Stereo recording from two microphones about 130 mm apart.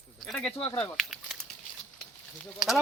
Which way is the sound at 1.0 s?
Centre (ahead or behind).